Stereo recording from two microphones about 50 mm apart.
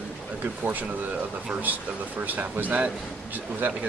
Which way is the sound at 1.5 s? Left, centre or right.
Right.